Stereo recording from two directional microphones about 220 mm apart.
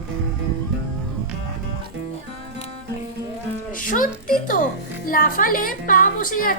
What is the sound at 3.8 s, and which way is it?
A woman's voice, 40° left (ahead or behind).